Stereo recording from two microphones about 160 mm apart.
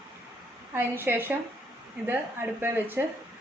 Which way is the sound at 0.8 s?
15° right (ahead or behind).